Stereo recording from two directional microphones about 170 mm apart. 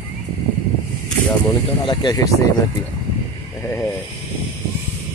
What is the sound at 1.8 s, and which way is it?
Speech, 25° left (ahead or behind).